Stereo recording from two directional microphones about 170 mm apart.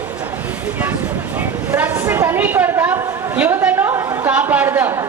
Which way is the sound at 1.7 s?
10° right (ahead or behind).